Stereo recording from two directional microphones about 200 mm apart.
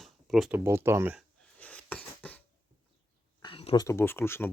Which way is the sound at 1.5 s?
5° left (ahead or behind).